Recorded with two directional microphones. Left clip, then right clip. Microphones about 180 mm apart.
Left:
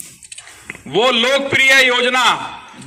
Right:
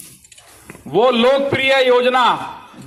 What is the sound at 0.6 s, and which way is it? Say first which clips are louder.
A man's voice: right 1 dB; 40° right (ahead or behind).